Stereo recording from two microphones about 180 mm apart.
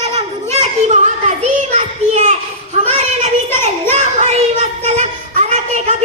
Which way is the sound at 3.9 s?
40° right (ahead or behind).